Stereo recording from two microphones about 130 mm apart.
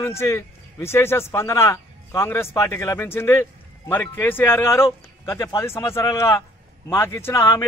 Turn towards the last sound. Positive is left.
turn(degrees=20)  # may be behind; listen again after turning